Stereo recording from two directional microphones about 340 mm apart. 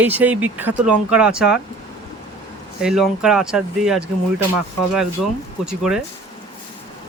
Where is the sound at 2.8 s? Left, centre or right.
Centre.